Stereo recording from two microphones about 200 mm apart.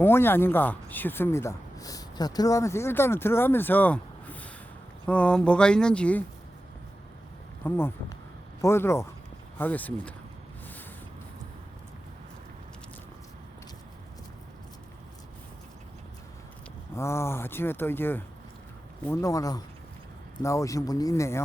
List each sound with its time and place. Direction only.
0.0 s speech: 10° left (ahead or behind)
7.6 s speech: 10° left (ahead or behind)
16.9 s speech: 15° left (ahead or behind)